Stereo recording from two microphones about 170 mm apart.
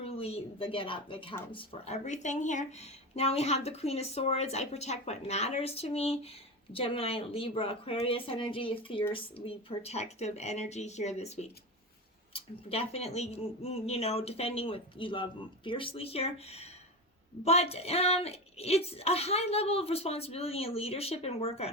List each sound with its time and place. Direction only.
0.0 s a woman's voice: 35° left (ahead or behind)